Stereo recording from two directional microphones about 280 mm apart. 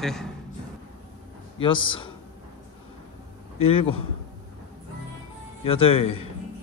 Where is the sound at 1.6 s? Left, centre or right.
Centre.